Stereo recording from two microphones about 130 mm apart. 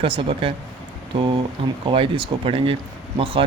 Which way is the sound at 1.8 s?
40° right (ahead or behind).